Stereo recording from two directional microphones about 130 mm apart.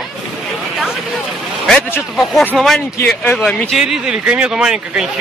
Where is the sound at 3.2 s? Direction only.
15° left (ahead or behind).